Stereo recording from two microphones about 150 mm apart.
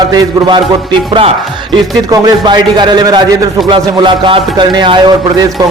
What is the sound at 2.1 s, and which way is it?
A man's voice, 25° right (ahead or behind).